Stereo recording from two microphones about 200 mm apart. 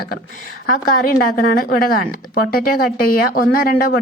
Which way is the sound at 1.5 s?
45° left (ahead or behind).